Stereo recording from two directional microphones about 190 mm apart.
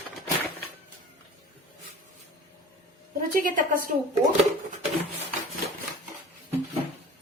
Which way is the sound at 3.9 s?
40° right (ahead or behind).